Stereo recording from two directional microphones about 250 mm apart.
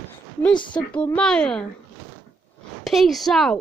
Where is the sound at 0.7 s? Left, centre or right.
Centre.